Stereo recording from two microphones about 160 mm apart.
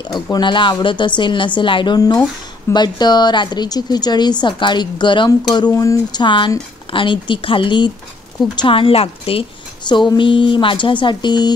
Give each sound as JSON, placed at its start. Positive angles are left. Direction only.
{"t": 0.1, "sound": "a woman's voice", "side_deg": 25}